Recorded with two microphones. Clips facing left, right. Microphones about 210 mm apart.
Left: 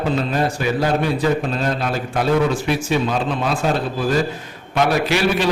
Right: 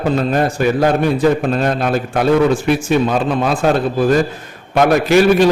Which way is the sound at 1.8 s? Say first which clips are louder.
Right 5 dB; 55° right (ahead or behind).